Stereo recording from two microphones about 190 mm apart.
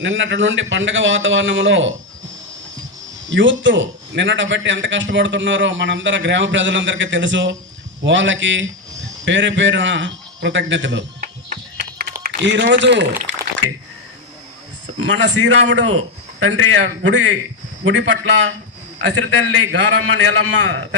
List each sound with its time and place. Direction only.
0.0 s a man's voice: 80° right
3.2 s a man's voice: 75° right (ahead or behind)
11.8 s a sound: 65° right (ahead or behind)
12.2 s speech: 70° right (ahead or behind)
15.2 s a man's voice: 80° right